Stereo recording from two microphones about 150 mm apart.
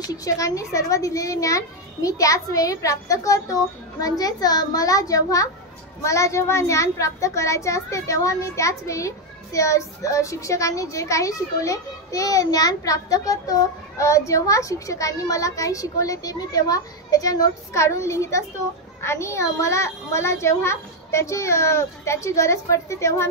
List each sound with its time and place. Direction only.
0.1 s a child's voice: 20° left (ahead or behind)